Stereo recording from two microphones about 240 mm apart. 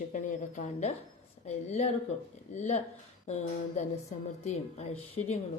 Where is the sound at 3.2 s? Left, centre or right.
Left.